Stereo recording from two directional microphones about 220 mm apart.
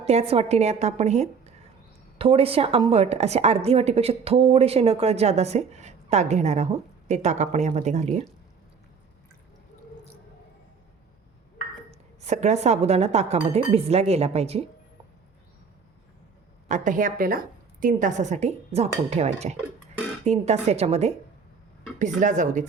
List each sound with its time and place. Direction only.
0.0 s a woman's voice: 30° right (ahead or behind)
11.9 s a woman's voice: 30° right (ahead or behind)
16.6 s a woman's voice: 35° right (ahead or behind)